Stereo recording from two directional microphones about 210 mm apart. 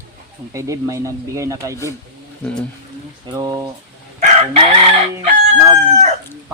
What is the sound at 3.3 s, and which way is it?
Speech, 15° right (ahead or behind).